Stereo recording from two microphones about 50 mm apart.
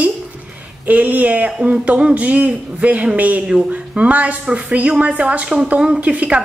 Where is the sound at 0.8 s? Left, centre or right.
Right.